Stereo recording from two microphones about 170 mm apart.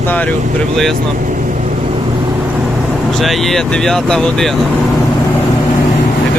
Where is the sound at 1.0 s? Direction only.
50° right (ahead or behind).